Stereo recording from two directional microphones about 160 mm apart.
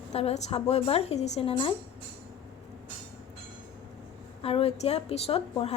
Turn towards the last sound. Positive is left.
turn(degrees=40)  # may be behind; listen again after turning